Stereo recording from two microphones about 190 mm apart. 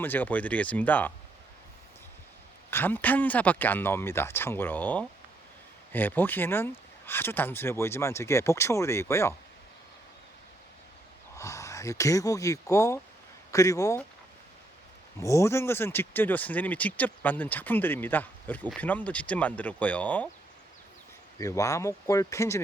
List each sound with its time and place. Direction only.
0.0 s speech: 10° left (ahead or behind)
2.6 s speech: 10° left (ahead or behind)
11.3 s speech: 15° left (ahead or behind)
15.2 s speech: 15° left (ahead or behind)
21.3 s speech: 15° left (ahead or behind)